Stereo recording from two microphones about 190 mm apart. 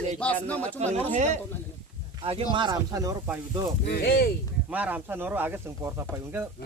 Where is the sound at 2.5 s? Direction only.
25° right (ahead or behind).